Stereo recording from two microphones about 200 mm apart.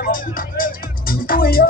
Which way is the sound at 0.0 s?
45° left (ahead or behind).